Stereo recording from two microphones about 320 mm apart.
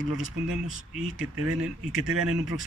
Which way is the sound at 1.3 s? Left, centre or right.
Right.